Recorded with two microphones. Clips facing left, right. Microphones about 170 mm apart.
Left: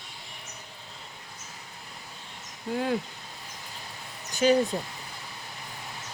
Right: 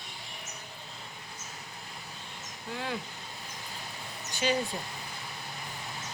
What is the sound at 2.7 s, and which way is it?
Speech, 45° left (ahead or behind).